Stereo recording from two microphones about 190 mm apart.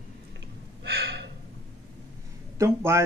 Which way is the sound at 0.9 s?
60° right (ahead or behind).